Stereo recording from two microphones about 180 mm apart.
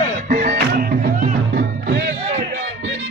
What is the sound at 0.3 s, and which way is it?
Music, 50° right (ahead or behind).